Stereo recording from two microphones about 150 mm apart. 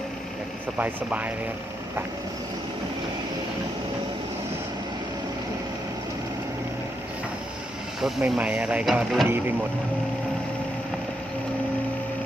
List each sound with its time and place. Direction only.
0.8 s speech: 10° right (ahead or behind)
8.0 s speech: 10° right (ahead or behind)
9.2 s speech: 15° right (ahead or behind)